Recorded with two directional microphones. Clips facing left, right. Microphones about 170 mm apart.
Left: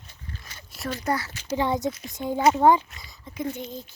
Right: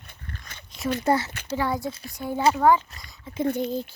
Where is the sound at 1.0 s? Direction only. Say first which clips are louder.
Right 4 dB; 25° right (ahead or behind).